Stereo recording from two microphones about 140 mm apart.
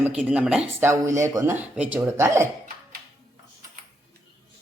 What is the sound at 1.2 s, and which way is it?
Speech, 20° right (ahead or behind).